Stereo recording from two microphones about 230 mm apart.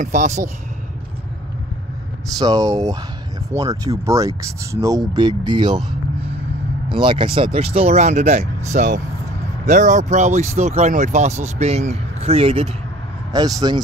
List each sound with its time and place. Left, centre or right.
0.0 s speech: right
2.3 s speech: centre
6.1 s vehicle: right
6.9 s speech: right